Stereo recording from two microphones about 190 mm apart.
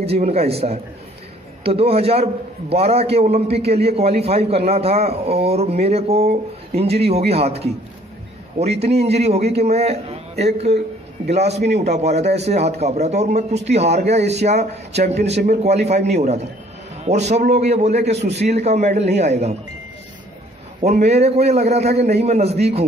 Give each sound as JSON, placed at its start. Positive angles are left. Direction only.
{"t": 0.0, "sound": "a man's voice", "side_deg": -30}
{"t": 20.8, "sound": "a man's voice", "side_deg": -35}